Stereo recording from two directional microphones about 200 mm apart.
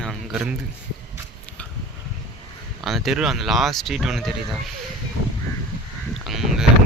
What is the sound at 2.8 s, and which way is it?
Speech, centre (ahead or behind).